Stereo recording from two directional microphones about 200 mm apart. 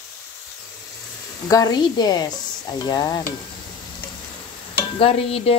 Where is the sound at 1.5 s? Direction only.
20° left (ahead or behind).